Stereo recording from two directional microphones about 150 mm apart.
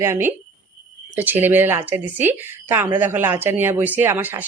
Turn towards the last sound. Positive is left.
turn(degrees=-15)  # may be behind; listen again after turning